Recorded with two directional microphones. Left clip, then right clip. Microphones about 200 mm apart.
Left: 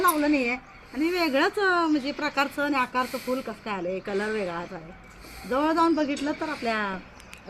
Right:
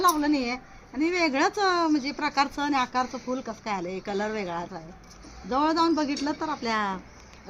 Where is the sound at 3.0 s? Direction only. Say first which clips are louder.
Left 2 dB; 5° right (ahead or behind).